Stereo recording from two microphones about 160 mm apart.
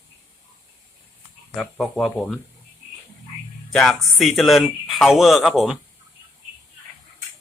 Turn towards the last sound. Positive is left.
turn(degrees=0)  # may be behind; listen again after turning